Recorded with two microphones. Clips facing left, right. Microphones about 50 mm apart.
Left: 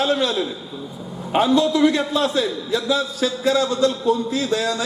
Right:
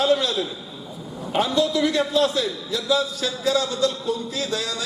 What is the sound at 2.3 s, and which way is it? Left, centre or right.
A man's voice, left.